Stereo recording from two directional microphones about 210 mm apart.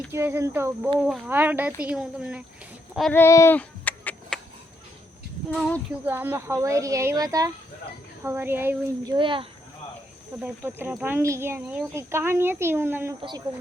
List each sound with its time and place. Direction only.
0.1 s speech: 10° right (ahead or behind)
3.1 s female singing: 10° left (ahead or behind)
5.5 s speech: 5° left (ahead or behind)
6.1 s speech: 10° right (ahead or behind)
9.1 s speech: 25° right (ahead or behind)
10.4 s speech: 10° right (ahead or behind)